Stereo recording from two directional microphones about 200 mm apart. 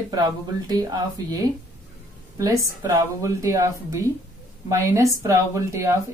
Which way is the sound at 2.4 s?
15° right (ahead or behind).